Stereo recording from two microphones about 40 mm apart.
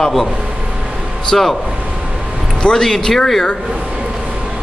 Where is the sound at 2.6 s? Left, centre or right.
Centre.